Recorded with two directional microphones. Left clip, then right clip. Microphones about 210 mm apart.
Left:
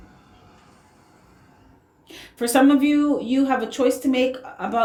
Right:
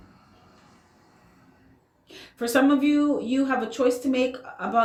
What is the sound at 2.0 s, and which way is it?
Speech, 30° left (ahead or behind).